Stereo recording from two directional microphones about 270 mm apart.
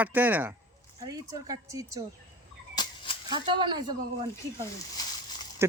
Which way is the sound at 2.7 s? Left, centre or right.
Centre.